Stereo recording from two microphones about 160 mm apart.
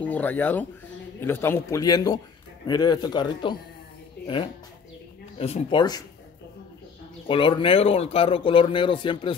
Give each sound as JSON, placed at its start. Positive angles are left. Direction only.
{"t": 0.0, "sound": "a man's voice", "side_deg": 10}
{"t": 5.4, "sound": "speech", "side_deg": 35}
{"t": 7.2, "sound": "speech", "side_deg": 35}